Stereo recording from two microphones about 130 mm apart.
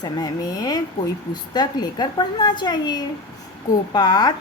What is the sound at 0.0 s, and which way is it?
A woman's voice, 30° left (ahead or behind).